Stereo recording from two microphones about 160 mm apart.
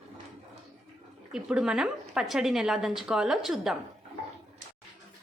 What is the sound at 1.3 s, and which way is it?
A woman's voice, 5° right (ahead or behind).